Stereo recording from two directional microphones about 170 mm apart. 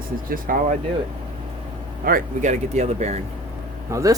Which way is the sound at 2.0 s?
50° right (ahead or behind).